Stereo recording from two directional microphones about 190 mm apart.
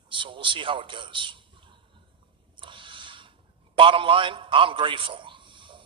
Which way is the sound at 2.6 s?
25° right (ahead or behind).